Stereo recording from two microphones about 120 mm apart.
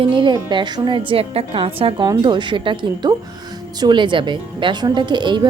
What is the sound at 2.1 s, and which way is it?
A woman's voice, 40° right (ahead or behind).